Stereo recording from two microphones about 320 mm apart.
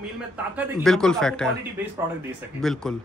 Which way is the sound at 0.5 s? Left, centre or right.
Centre.